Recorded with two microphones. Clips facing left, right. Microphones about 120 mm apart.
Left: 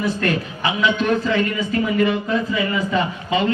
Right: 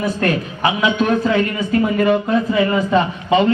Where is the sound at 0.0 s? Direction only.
50° right (ahead or behind).